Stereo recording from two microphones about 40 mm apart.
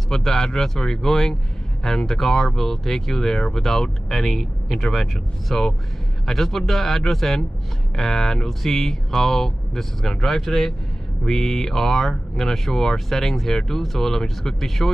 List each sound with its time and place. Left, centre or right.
0.1 s speech: centre